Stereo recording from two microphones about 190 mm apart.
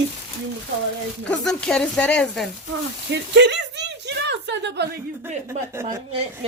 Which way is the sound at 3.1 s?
65° right (ahead or behind).